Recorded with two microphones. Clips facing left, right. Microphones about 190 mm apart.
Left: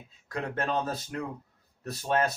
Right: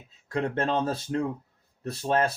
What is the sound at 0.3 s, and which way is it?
Speech, 30° right (ahead or behind).